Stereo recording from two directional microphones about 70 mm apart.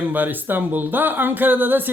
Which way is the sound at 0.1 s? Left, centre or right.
Right.